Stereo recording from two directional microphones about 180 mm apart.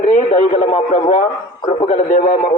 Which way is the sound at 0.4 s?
30° left (ahead or behind).